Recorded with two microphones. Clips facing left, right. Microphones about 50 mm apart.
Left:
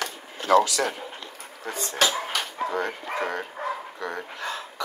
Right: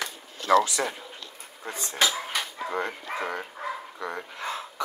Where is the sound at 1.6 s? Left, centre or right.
Left.